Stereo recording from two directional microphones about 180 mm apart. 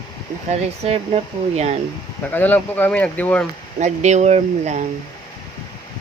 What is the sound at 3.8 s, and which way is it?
Speech, 40° right (ahead or behind).